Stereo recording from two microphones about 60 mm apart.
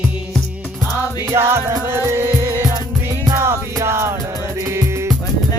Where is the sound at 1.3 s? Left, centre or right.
Right.